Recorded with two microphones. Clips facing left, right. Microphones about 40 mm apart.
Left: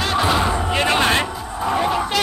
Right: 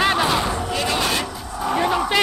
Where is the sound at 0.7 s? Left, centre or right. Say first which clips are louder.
Left 5 dB; left.